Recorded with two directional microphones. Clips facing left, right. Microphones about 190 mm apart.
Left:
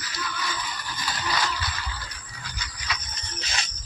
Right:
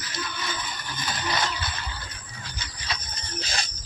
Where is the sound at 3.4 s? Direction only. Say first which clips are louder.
Right 2 dB; 35° right (ahead or behind).